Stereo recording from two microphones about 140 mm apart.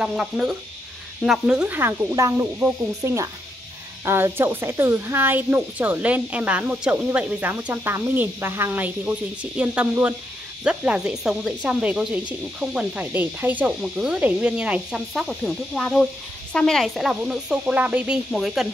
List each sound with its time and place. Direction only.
0.0 s speech: 5° right (ahead or behind)